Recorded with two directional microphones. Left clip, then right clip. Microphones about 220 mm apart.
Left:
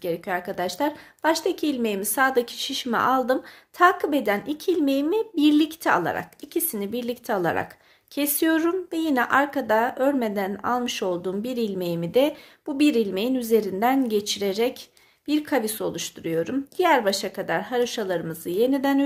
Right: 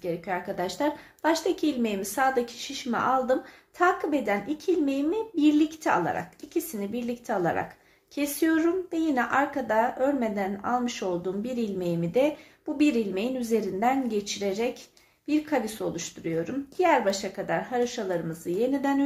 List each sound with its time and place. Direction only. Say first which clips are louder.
0.0 s a woman's voice: left 4 dB; 35° left (ahead or behind)